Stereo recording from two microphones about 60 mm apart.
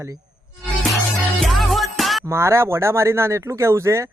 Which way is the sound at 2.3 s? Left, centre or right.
Right.